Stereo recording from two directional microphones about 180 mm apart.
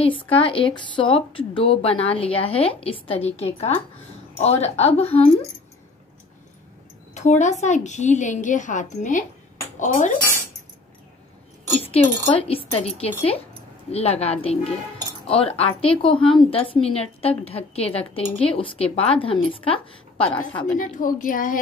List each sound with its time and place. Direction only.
0.0 s a woman's voice: 30° left (ahead or behind)
7.2 s a woman's voice: 40° left (ahead or behind)
11.8 s a woman's voice: 35° left (ahead or behind)
20.7 s a woman's voice: 50° left (ahead or behind)